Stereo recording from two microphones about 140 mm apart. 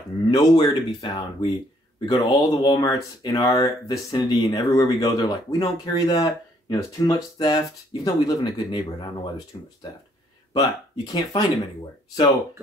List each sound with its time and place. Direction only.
0.3 s speech: 30° left (ahead or behind)
10.5 s speech: 30° left (ahead or behind)